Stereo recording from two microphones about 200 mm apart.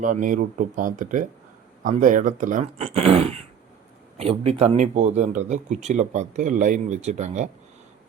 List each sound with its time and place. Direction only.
0.0 s speech: 40° right (ahead or behind)